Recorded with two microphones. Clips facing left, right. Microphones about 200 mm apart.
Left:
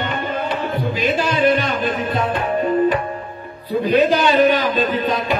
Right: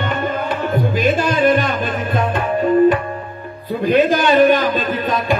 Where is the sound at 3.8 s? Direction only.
50° right (ahead or behind).